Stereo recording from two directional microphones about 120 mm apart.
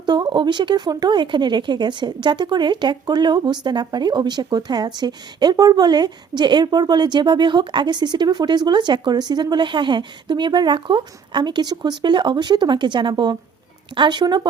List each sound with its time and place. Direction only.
0.0 s speech: 40° right (ahead or behind)